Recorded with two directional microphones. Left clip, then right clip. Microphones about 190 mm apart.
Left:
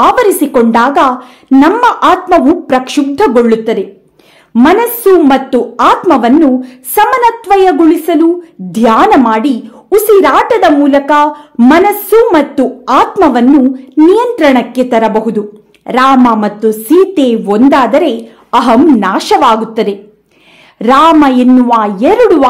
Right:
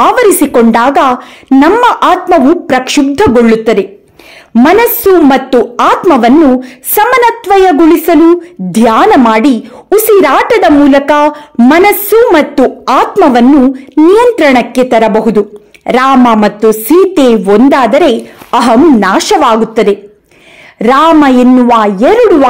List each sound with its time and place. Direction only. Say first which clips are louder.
0.0 s a woman's voice: right 1 dB; 35° right (ahead or behind)